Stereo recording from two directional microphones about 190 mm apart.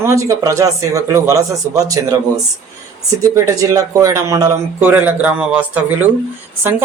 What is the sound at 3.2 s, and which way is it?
Speech, 15° right (ahead or behind).